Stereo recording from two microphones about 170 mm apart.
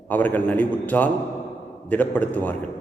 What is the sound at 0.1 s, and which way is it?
A man's voice, 10° left (ahead or behind).